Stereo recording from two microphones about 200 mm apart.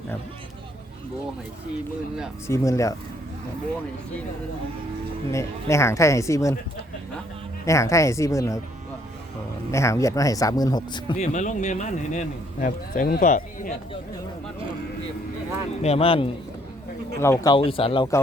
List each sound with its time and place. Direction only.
2.5 s speech: 15° left (ahead or behind)
5.3 s speech: 15° left (ahead or behind)
7.6 s speech: 15° left (ahead or behind)
9.7 s speech: 15° left (ahead or behind)
11.2 s speech: 35° left (ahead or behind)
15.8 s speech: 30° left (ahead or behind)
17.2 s speech: 15° left (ahead or behind)